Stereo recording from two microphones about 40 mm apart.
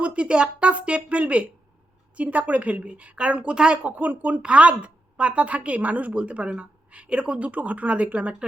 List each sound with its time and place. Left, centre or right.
0.0 s a woman's voice: right
3.8 s a woman's voice: right